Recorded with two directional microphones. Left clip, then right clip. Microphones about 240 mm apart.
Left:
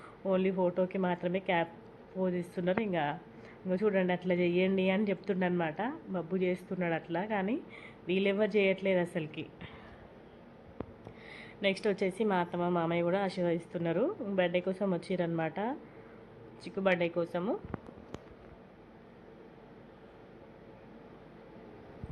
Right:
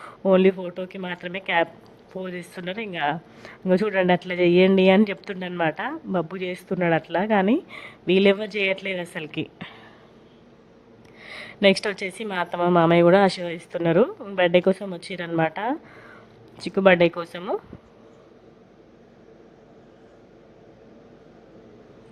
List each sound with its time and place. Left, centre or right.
0.0 s speech: right
11.2 s speech: right